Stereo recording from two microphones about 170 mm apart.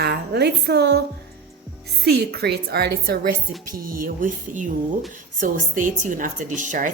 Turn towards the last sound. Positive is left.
turn(degrees=-50)  # may be behind; listen again after turning